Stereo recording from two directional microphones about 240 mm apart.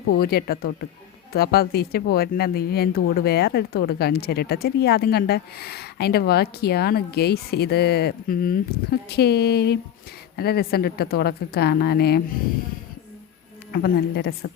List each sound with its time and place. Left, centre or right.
0.2 s speech: left
13.7 s speech: left